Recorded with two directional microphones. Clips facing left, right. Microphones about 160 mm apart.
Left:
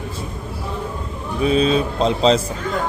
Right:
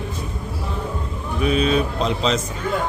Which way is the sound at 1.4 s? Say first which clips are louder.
Left 2 dB; 30° left (ahead or behind).